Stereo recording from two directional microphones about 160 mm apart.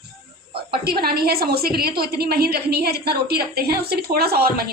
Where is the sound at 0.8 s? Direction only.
75° right (ahead or behind).